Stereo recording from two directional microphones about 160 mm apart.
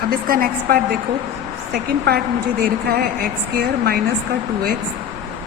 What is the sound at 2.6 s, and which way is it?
A woman's voice, 70° right (ahead or behind).